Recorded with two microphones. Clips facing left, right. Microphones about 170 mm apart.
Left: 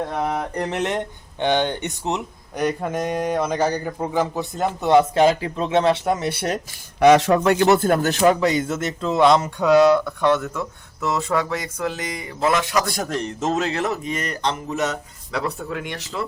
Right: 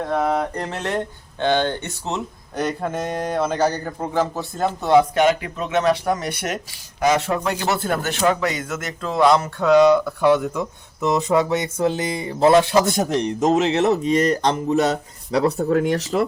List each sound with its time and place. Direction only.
0.2 s speech: 15° left (ahead or behind)
5.1 s speech: 30° left (ahead or behind)
7.0 s a man's voice: 70° left (ahead or behind)
7.5 s speech: 55° left (ahead or behind)
8.4 s speech: 25° left (ahead or behind)
9.6 s speech: 5° left (ahead or behind); by 16.0 s 40° right (ahead or behind)